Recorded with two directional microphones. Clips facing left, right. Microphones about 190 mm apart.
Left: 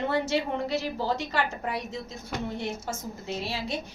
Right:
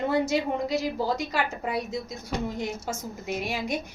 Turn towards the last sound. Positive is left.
turn(degrees=-15)  # may be behind; listen again after turning